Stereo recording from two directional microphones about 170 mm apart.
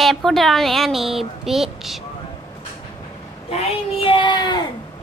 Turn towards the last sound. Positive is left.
turn(degrees=25)  # may be behind; listen again after turning